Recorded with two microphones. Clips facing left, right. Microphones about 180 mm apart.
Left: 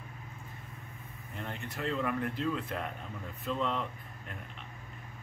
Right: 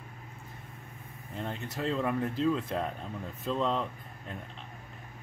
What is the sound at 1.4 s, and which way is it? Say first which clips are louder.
Speech: right 3 dB; 30° right (ahead or behind).